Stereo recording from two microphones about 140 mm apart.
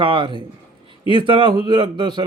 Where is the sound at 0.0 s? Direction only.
35° right (ahead or behind).